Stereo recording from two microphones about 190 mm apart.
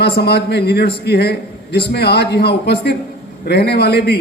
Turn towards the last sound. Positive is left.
turn(degrees=60)  # may be behind; listen again after turning